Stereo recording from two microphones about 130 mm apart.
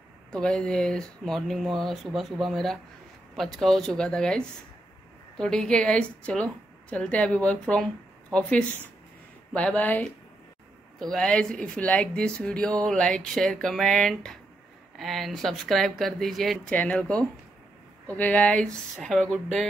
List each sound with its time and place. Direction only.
0.3 s a woman's voice: 5° left (ahead or behind)